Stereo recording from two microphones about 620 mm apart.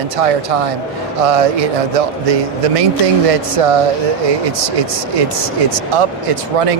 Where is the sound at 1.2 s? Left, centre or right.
Right.